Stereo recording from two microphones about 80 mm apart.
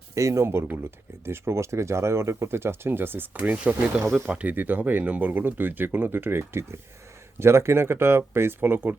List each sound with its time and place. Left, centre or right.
0.1 s speech: right